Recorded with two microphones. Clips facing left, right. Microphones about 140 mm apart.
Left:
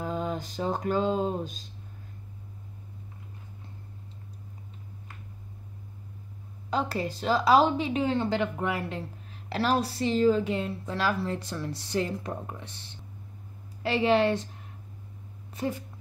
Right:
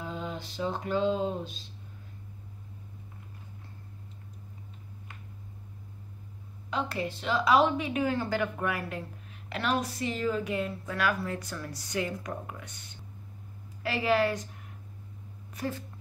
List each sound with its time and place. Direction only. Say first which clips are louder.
0.0 s music: left 5 dB; 45° left (ahead or behind)
6.7 s a woman's voice: left 3 dB; 35° left (ahead or behind)
15.5 s speech: left 3 dB; 20° left (ahead or behind)